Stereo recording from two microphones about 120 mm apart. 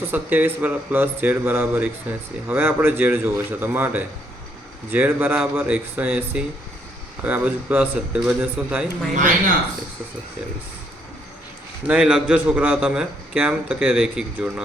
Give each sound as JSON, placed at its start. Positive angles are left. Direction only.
{"t": 0.0, "sound": "a man's voice", "side_deg": -15}
{"t": 5.4, "sound": "speech", "side_deg": -10}
{"t": 11.9, "sound": "speech", "side_deg": -10}